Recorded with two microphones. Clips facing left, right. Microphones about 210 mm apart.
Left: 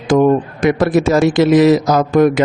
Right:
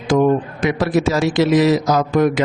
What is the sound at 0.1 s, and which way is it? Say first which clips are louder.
Speech: left 3 dB; 50° left (ahead or behind).